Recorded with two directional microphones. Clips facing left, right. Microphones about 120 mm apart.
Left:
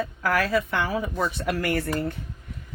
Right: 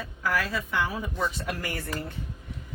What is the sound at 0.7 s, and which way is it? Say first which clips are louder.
Speech: left 3 dB; 70° left (ahead or behind).